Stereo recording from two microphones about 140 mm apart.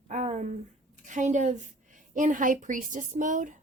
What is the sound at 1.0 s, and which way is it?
A woman's voice, 60° right (ahead or behind).